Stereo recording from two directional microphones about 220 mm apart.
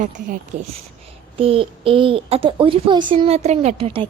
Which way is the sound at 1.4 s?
25° right (ahead or behind).